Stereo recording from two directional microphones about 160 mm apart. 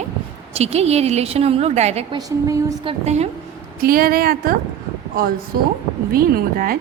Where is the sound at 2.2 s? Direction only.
20° right (ahead or behind).